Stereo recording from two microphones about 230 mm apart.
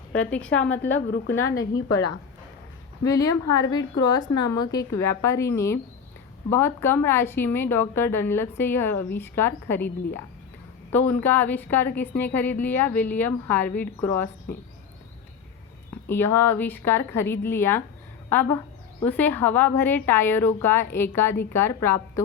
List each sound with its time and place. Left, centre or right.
0.1 s a woman's voice: centre
0.6 s a woman's voice: left
1.7 s a woman's voice: left
3.0 s a woman's voice: centre
10.9 s a woman's voice: centre
16.0 s a woman's voice: centre